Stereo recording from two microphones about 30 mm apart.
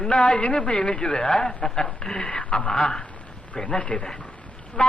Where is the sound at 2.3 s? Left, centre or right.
Left.